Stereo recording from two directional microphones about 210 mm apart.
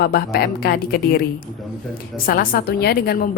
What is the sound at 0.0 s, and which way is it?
A woman's voice, 50° left (ahead or behind).